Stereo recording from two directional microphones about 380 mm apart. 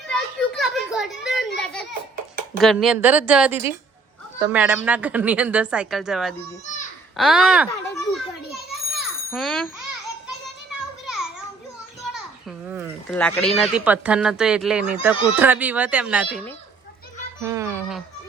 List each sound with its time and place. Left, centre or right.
0.1 s children playing: centre
2.6 s a woman's voice: centre
7.7 s children playing: centre
9.3 s a woman's voice: centre
11.0 s children playing: centre
12.1 s a child's voice: centre